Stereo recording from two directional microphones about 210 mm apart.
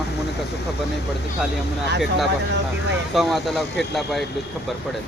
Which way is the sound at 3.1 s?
Centre (ahead or behind).